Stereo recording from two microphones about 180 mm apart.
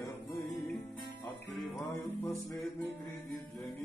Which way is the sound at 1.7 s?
15° left (ahead or behind).